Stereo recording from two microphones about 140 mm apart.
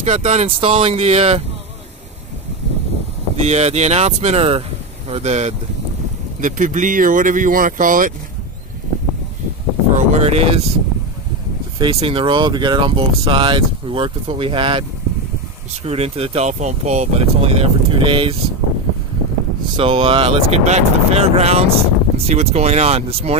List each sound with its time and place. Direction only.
0.0 s speech: 55° right (ahead or behind)
3.3 s speech: 50° right (ahead or behind)
6.4 s speech: 65° right (ahead or behind)
9.9 s a sound: 50° right (ahead or behind)
11.8 s speech: 40° right (ahead or behind)
19.8 s speech: 40° right (ahead or behind)